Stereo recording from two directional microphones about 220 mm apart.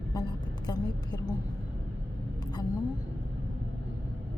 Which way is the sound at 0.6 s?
20° left (ahead or behind).